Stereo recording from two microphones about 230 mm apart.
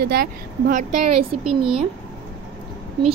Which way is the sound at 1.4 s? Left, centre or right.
Right.